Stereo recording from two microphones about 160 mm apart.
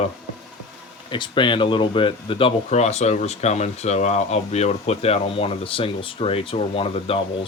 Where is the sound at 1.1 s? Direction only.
30° left (ahead or behind).